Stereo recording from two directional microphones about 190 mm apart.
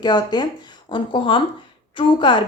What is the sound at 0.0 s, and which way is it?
A woman's voice, 20° left (ahead or behind).